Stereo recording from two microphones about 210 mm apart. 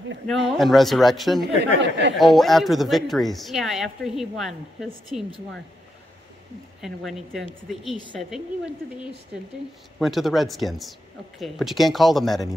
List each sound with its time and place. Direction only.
0.3 s speech: centre (ahead or behind)
1.4 s speech: 55° right (ahead or behind)
2.1 s speech: centre (ahead or behind)
6.8 s speech: centre (ahead or behind)
9.9 s speech: centre (ahead or behind)